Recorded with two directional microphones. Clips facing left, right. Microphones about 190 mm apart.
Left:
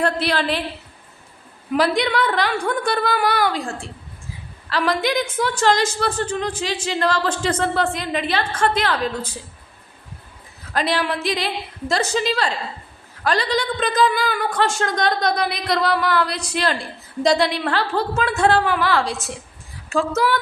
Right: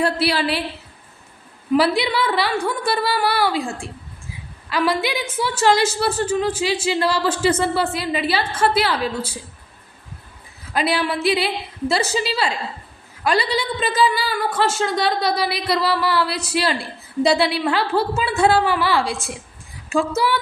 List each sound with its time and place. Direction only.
0.0 s a woman's voice: 10° right (ahead or behind)
1.7 s a woman's voice: 5° right (ahead or behind)
10.7 s a woman's voice: 10° right (ahead or behind)